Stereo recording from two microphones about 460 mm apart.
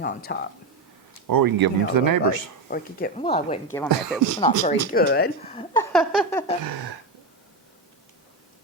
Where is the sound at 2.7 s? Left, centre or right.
Centre.